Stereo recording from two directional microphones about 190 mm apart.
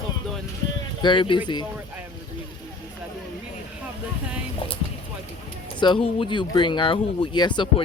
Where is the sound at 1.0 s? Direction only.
25° left (ahead or behind).